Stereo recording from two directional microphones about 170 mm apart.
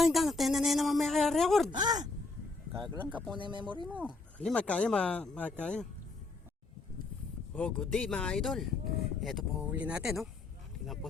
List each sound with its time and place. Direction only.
0.0 s a woman's voice: centre (ahead or behind)
1.7 s speech: 25° right (ahead or behind)
3.8 s speech: 10° right (ahead or behind)
4.4 s speech: 5° left (ahead or behind)
7.5 s a woman's voice: 5° left (ahead or behind)